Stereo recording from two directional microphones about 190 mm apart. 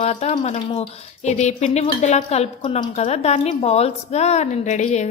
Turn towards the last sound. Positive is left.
turn(degrees=40)  # may be behind; listen again after turning